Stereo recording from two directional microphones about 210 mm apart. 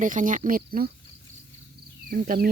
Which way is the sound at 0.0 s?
40° right (ahead or behind).